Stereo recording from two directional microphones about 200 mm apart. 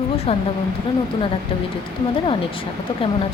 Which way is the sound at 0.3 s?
30° left (ahead or behind).